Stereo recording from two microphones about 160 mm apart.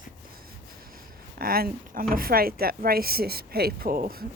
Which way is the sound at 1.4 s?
70° right (ahead or behind).